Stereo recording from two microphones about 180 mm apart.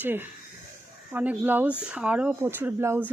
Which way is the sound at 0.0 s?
10° right (ahead or behind).